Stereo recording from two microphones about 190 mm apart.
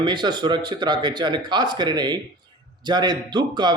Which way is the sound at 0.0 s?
25° right (ahead or behind).